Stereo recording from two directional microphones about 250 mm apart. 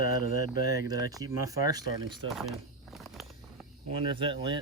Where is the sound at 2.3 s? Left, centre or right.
Centre.